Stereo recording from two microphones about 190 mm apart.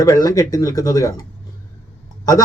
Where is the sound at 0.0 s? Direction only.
20° left (ahead or behind).